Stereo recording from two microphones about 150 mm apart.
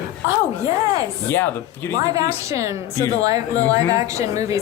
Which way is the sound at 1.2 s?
15° left (ahead or behind).